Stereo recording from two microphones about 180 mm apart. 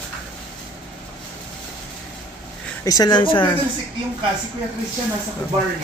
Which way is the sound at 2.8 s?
20° left (ahead or behind).